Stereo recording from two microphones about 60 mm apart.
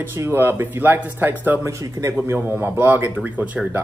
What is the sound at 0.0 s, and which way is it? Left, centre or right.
Speech, right.